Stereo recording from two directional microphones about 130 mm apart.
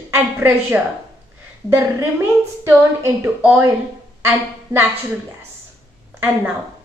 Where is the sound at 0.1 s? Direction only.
20° right (ahead or behind).